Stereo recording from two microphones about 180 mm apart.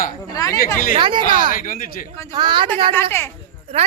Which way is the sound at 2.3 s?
25° right (ahead or behind).